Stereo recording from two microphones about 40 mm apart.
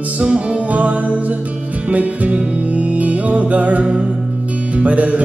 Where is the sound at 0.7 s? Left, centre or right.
Right.